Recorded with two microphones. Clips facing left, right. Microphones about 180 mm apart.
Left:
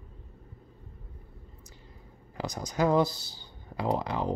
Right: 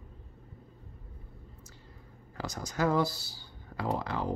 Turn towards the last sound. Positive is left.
turn(degrees=15)  # may be behind; listen again after turning